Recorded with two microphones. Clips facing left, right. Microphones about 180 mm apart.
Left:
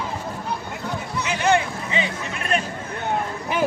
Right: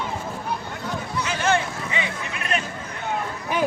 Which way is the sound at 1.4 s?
20° left (ahead or behind).